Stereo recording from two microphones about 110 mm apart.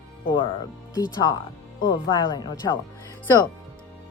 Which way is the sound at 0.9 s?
35° left (ahead or behind).